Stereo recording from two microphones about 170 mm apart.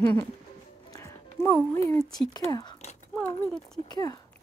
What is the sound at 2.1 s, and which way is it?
Speech, 25° left (ahead or behind).